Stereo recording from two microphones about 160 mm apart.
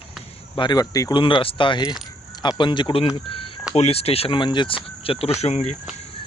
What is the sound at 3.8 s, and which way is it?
Speech, 40° left (ahead or behind).